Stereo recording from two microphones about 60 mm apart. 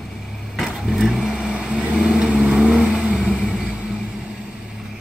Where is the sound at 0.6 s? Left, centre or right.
Centre.